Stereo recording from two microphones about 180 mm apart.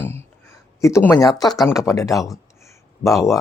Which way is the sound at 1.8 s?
15° left (ahead or behind).